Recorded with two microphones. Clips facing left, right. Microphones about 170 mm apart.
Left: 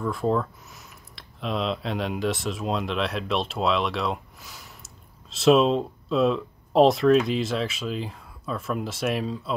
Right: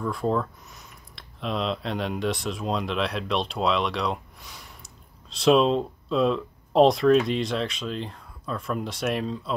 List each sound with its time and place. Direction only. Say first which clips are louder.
0.0 s speech: left 1 dB; centre (ahead or behind)